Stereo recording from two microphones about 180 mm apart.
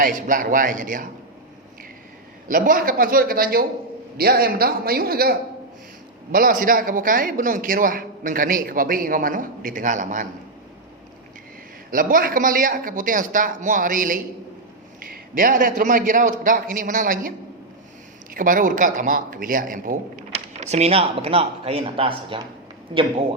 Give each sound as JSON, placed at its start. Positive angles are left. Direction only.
{"t": 0.0, "sound": "a man's voice", "side_deg": -50}
{"t": 2.5, "sound": "a man's voice", "side_deg": -50}
{"t": 6.3, "sound": "a man's voice", "side_deg": -50}
{"t": 11.9, "sound": "a man's voice", "side_deg": -50}
{"t": 18.3, "sound": "a man's voice", "side_deg": -50}
{"t": 20.3, "sound": "a man's voice", "side_deg": -40}